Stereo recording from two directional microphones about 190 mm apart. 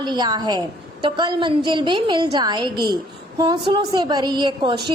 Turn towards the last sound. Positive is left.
turn(degrees=-25)  # may be behind; listen again after turning